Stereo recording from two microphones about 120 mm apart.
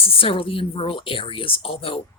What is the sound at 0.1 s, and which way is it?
A woman's voice, 50° left (ahead or behind).